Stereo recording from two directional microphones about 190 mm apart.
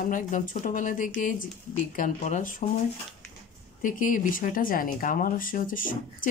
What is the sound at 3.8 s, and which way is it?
Speech, 45° left (ahead or behind).